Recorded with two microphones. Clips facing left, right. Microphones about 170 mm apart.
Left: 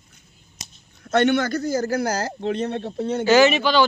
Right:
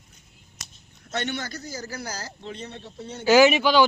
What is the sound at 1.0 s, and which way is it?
A man's voice, 60° left (ahead or behind).